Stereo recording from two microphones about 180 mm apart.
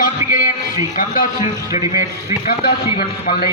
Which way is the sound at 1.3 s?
20° right (ahead or behind).